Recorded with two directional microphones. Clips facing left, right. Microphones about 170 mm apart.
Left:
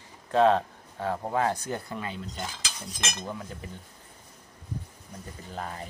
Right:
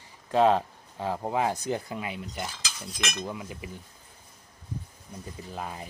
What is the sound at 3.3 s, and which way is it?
Speech, 10° right (ahead or behind).